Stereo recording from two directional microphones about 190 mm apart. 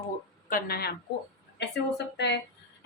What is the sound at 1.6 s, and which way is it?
Speech, 65° left (ahead or behind).